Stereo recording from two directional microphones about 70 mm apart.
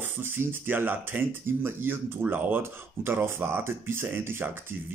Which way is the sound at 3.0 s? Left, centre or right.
Right.